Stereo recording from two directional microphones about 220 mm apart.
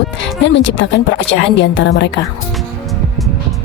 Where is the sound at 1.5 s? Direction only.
50° left (ahead or behind).